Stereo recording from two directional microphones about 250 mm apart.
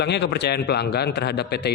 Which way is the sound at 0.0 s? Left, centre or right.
Left.